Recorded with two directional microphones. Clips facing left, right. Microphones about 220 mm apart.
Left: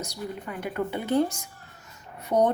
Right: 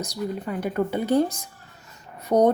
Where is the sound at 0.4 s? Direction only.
35° right (ahead or behind).